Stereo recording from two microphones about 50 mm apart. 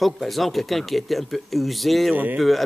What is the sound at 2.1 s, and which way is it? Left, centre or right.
Speech, right.